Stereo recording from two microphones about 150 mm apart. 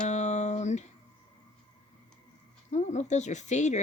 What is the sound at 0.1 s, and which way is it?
Music, 50° left (ahead or behind).